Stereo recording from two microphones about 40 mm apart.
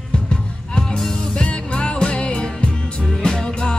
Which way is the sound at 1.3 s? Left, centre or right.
Left.